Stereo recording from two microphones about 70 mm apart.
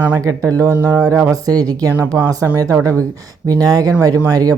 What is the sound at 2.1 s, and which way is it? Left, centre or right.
Speech, right.